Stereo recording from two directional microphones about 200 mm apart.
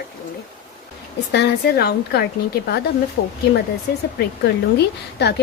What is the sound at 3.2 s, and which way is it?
Speech, 65° left (ahead or behind).